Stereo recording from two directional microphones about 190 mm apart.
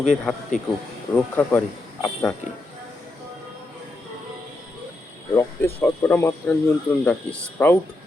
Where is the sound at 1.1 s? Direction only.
10° left (ahead or behind).